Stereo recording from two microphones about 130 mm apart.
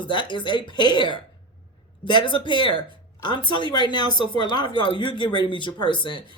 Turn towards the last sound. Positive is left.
turn(degrees=40)  # may be behind; listen again after turning